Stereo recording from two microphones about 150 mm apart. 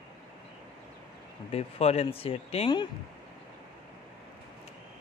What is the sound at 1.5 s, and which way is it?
A man's voice, 45° left (ahead or behind).